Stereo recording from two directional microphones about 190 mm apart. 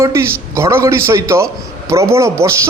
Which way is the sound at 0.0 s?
15° right (ahead or behind).